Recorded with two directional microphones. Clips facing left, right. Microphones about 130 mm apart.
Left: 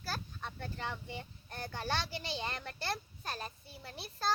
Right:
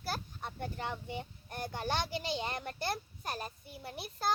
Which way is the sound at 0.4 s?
15° right (ahead or behind).